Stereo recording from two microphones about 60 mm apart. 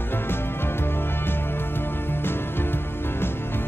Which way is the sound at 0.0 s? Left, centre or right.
Left.